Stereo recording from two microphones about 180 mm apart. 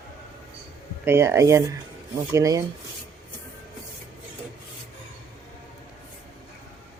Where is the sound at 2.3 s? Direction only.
20° right (ahead or behind).